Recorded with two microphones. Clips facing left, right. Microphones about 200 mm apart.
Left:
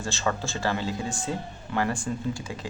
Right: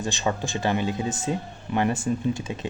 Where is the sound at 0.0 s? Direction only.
15° right (ahead or behind).